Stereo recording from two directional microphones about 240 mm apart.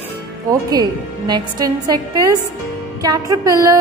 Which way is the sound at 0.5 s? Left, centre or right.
Centre.